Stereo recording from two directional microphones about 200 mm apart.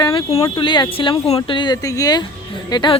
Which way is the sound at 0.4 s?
25° left (ahead or behind).